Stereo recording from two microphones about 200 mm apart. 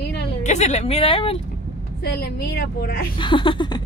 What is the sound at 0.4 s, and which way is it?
Speech, 35° left (ahead or behind).